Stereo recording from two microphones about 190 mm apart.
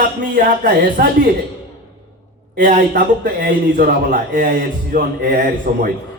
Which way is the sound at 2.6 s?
45° right (ahead or behind).